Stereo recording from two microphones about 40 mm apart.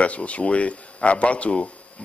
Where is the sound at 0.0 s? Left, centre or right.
Left.